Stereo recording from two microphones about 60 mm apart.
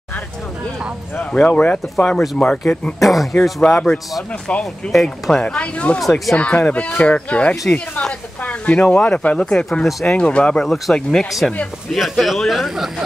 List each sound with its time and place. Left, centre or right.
1.3 s speech: centre
3.0 s speech: centre
3.6 s speech: centre
5.9 s speech: centre
6.3 s speech: left
8.4 s a sound: left
8.7 s speech: centre
9.8 s speech: centre
10.1 s speech: centre
10.6 s speech: centre
11.2 s speech: centre